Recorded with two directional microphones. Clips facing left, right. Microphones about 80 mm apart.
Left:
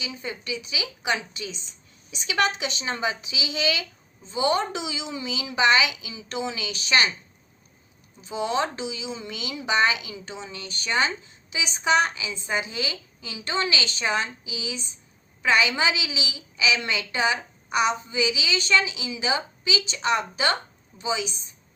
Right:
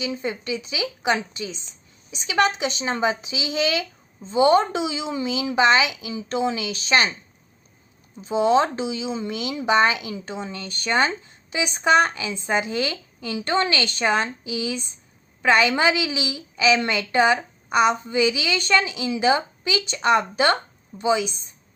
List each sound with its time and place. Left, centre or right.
0.0 s a woman's voice: right
8.2 s a woman's voice: right